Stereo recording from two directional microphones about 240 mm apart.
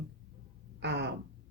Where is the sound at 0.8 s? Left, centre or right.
Right.